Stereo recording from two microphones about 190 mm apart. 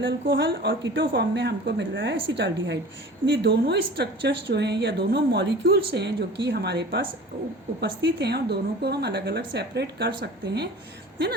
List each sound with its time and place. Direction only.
0.0 s a woman's voice: 65° right (ahead or behind)